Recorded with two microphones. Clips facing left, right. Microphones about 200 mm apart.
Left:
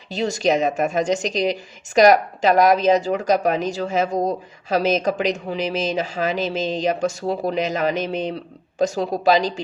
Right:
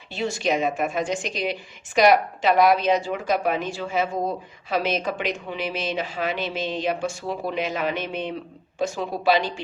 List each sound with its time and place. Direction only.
0.1 s a woman's voice: 40° left (ahead or behind)